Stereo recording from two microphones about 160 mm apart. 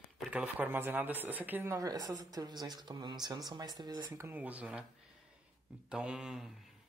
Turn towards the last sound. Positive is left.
turn(degrees=-5)  # may be behind; listen again after turning